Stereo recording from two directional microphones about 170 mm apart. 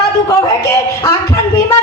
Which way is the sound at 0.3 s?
20° left (ahead or behind).